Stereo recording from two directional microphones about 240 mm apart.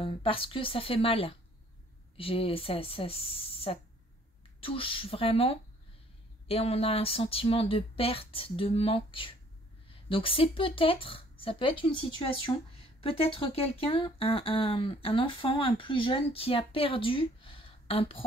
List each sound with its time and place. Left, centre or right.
0.0 s speech: left